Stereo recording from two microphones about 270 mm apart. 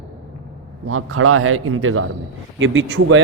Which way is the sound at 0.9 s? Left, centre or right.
Right.